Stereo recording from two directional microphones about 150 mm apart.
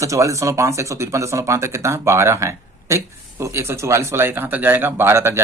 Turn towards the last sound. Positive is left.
turn(degrees=-15)  # may be behind; listen again after turning